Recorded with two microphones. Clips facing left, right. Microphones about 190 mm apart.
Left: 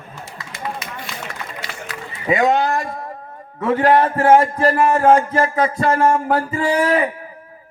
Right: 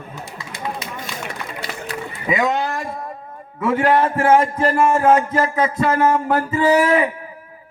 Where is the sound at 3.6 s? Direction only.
35° left (ahead or behind).